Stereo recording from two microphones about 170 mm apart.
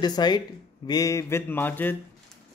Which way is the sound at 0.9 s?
20° left (ahead or behind).